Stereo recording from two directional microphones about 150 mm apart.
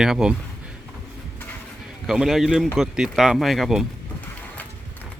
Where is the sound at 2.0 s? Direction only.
Centre (ahead or behind).